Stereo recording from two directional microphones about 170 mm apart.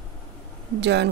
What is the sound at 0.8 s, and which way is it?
Speech, 90° right.